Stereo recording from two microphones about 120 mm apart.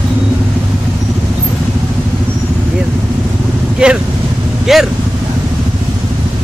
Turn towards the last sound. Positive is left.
turn(degrees=-5)  # may be behind; listen again after turning